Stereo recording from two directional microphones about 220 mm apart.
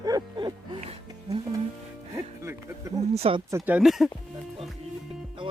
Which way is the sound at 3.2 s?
25° right (ahead or behind).